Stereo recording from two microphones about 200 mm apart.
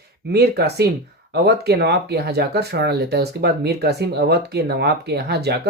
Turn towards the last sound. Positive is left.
turn(degrees=-55)  # may be behind; listen again after turning